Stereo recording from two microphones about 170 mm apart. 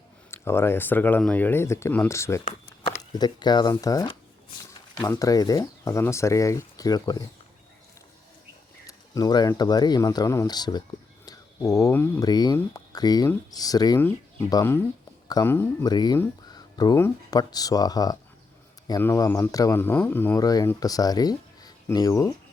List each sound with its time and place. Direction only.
0.3 s speech: 15° left (ahead or behind)
8.9 s speech: 20° left (ahead or behind)